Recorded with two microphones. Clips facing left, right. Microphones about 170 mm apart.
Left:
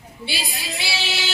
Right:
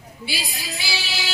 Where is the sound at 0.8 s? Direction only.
25° left (ahead or behind).